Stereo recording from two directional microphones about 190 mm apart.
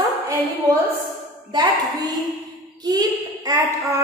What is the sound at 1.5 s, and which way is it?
A child's voice, 20° right (ahead or behind).